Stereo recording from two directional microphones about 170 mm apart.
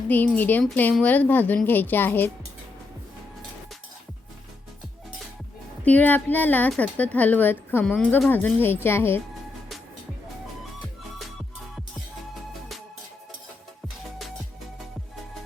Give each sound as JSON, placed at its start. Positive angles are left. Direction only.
{"t": 0.1, "sound": "a woman's voice", "side_deg": 10}
{"t": 5.8, "sound": "a woman's voice", "side_deg": 10}